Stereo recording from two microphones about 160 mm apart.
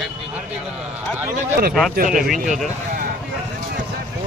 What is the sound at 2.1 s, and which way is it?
Speech, centre (ahead or behind).